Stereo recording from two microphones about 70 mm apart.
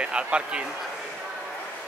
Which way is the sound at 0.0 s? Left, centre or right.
Centre.